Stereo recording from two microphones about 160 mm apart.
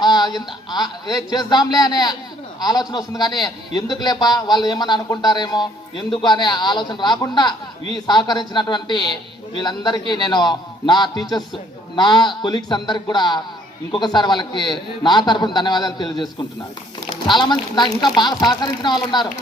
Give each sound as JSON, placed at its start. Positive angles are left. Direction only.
{"t": 0.0, "sound": "a man's voice", "side_deg": 25}
{"t": 17.2, "sound": "a man's voice", "side_deg": 30}